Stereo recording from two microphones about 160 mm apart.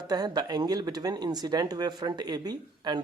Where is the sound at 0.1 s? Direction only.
25° right (ahead or behind).